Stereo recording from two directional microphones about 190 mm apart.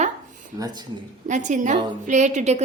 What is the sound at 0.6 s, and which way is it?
Speech, 20° right (ahead or behind).